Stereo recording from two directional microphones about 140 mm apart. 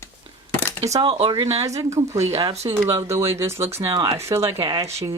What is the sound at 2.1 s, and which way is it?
Speech, 50° right (ahead or behind).